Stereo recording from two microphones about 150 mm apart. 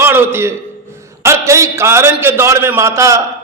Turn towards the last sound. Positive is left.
turn(degrees=-20)  # may be behind; listen again after turning